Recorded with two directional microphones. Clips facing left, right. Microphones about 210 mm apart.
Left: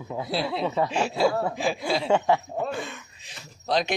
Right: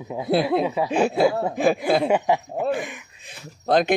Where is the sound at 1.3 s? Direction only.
20° right (ahead or behind).